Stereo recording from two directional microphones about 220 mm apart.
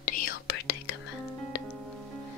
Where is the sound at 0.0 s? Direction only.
40° left (ahead or behind).